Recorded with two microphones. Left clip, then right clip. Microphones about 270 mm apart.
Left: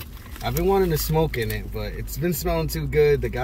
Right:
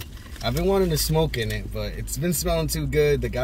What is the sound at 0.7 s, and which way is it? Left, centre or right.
Speech, centre.